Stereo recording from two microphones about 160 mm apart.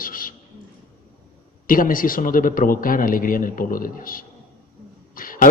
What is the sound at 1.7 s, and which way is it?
A man's voice, 60° left (ahead or behind).